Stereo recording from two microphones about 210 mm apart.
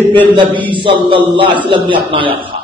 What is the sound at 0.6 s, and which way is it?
A man's voice, 25° right (ahead or behind).